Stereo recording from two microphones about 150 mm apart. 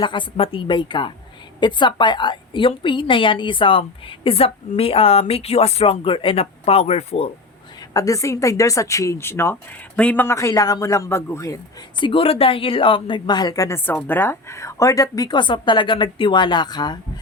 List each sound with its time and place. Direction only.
0.0 s a woman's voice: 35° left (ahead or behind)
7.9 s speech: 20° left (ahead or behind)